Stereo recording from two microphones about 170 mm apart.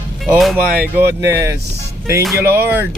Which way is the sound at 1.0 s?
15° right (ahead or behind).